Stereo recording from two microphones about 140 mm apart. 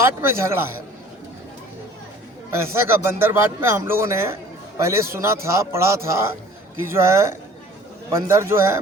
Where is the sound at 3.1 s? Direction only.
15° right (ahead or behind).